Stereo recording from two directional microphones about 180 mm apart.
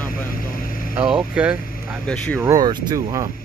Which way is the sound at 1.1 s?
5° right (ahead or behind).